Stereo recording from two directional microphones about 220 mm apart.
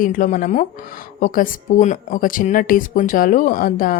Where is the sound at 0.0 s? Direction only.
40° left (ahead or behind).